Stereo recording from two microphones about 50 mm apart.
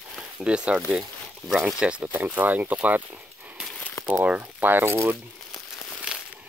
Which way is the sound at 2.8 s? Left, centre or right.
Right.